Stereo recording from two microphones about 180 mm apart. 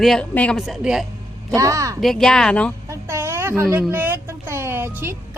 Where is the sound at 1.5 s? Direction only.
20° right (ahead or behind).